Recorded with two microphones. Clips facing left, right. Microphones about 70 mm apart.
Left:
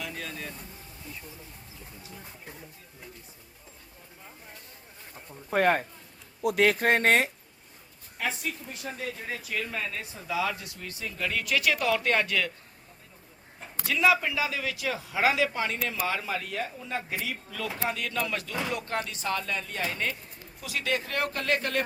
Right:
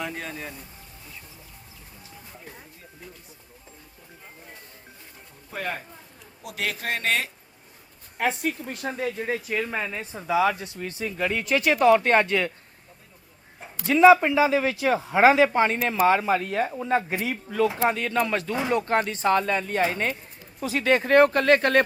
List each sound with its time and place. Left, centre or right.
0.0 s speech: right
5.5 s speech: left
8.2 s speech: right
13.8 s speech: right